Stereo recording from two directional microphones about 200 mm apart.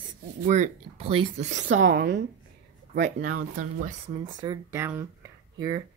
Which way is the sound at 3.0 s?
40° right (ahead or behind).